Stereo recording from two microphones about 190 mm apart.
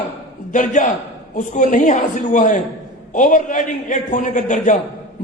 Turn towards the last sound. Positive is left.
turn(degrees=40)  # may be behind; listen again after turning